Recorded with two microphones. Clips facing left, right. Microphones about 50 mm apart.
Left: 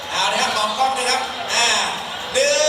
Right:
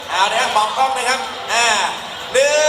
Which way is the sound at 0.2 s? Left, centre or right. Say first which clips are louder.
Right 4 dB; right.